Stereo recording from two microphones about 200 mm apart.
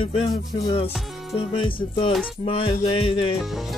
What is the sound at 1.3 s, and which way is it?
Music, 25° left (ahead or behind).